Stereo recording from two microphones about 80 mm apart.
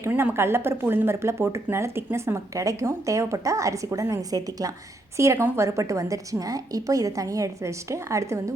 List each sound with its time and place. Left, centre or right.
0.1 s a woman's voice: right